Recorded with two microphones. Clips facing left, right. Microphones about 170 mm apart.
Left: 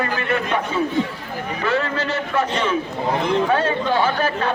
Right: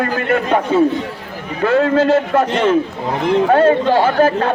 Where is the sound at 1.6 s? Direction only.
50° right (ahead or behind).